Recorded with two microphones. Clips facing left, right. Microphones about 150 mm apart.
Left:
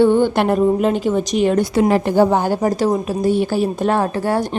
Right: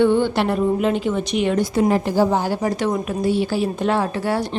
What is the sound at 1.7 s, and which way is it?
A woman's voice, 75° left (ahead or behind).